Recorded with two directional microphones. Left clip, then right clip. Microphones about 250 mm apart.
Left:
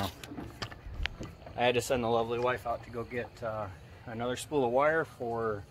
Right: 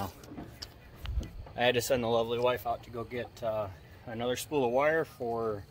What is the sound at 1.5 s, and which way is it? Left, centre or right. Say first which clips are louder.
Speech: right 1 dB; centre.